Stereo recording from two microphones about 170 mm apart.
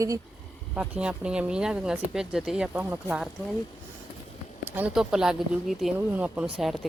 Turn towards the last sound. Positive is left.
turn(degrees=0)  # may be behind; listen again after turning